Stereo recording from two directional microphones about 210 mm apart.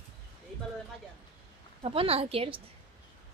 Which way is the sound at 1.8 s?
25° right (ahead or behind).